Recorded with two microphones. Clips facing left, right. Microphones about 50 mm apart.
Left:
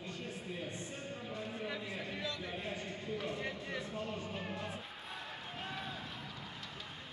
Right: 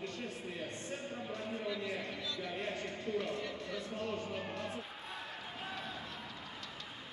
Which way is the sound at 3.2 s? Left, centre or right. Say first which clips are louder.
Even; left.